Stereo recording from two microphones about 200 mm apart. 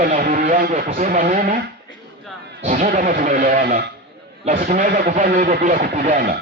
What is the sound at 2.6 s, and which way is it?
Speech, 40° right (ahead or behind).